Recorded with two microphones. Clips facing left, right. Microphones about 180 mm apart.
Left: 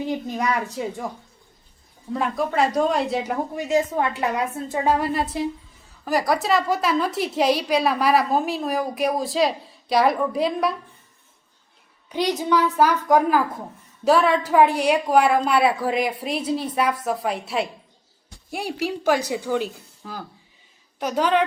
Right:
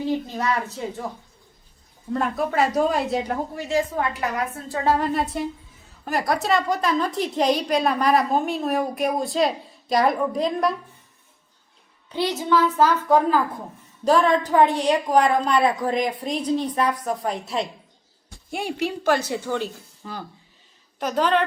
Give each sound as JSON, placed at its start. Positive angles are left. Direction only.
{"t": 0.1, "sound": "a woman's voice", "side_deg": 15}
{"t": 2.1, "sound": "a woman's voice", "side_deg": 0}
{"t": 3.5, "sound": "a woman's voice", "side_deg": 15}
{"t": 12.0, "sound": "a woman's voice", "side_deg": 15}
{"t": 18.5, "sound": "a woman's voice", "side_deg": 5}